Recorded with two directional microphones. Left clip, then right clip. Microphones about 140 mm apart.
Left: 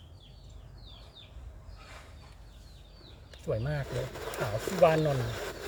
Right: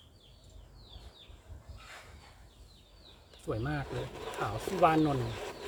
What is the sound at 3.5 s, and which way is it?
Speech, 20° right (ahead or behind).